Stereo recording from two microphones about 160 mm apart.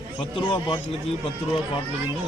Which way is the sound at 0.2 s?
35° left (ahead or behind).